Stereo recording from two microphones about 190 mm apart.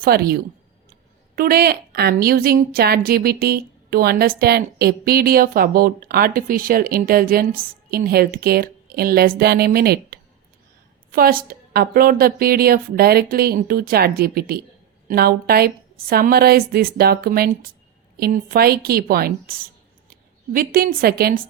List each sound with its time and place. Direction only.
0.0 s a woman's voice: 55° right (ahead or behind)
1.4 s a woman's voice: 50° right (ahead or behind)